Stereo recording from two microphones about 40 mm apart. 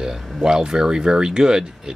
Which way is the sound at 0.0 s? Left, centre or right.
Centre.